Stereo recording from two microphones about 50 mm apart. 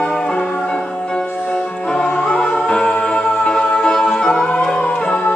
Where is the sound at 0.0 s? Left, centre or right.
Centre.